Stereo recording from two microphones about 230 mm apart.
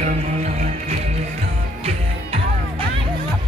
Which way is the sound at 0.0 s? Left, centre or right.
Right.